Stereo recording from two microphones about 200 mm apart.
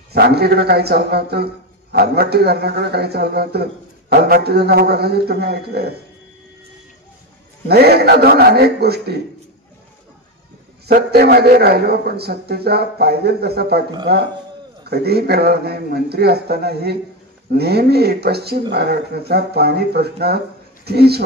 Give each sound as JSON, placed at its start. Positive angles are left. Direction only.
{"t": 0.1, "sound": "a man's voice", "side_deg": -55}
{"t": 7.6, "sound": "a man's voice", "side_deg": -50}
{"t": 10.9, "sound": "a man's voice", "side_deg": -50}